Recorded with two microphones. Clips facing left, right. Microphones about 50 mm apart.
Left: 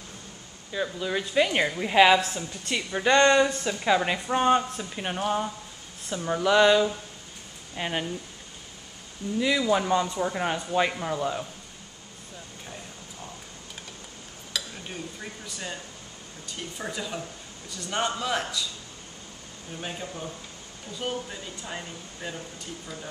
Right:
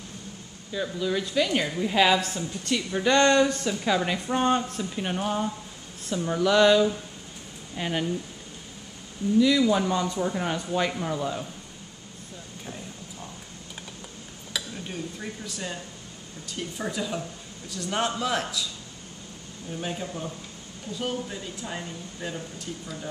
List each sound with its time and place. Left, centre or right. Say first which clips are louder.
0.7 s a woman's voice: right 1 dB; centre
9.6 s a woman's voice: even; centre
14.5 s dishes: right 1 dB; centre
15.1 s speech: right 3 dB; centre
19.8 s speech: right 2 dB; centre